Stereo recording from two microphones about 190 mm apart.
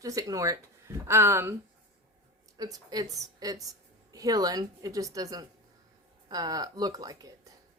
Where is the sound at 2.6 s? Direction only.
20° right (ahead or behind).